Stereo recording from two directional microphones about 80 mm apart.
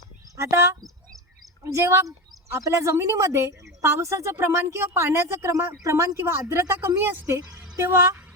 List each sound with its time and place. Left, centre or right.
0.3 s a woman's voice: right
7.3 s a woman's voice: right
7.9 s speech: right